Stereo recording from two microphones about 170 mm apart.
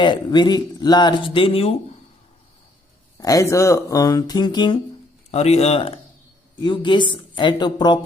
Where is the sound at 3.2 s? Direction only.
20° left (ahead or behind).